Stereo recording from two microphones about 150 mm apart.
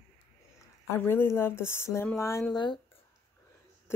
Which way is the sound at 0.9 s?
15° left (ahead or behind).